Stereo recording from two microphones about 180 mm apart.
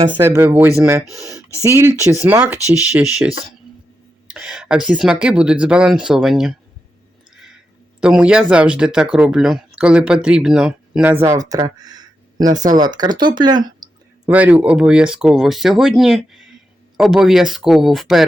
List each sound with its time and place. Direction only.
0.1 s speech: 10° right (ahead or behind)
8.0 s speech: 5° right (ahead or behind); by 13.6 s 25° right (ahead or behind)
14.3 s speech: 10° right (ahead or behind)